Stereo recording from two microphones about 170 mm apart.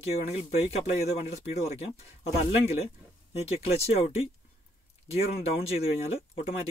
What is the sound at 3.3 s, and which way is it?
Speech, 35° left (ahead or behind).